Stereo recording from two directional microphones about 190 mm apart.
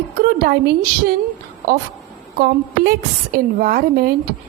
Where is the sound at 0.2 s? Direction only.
55° right (ahead or behind).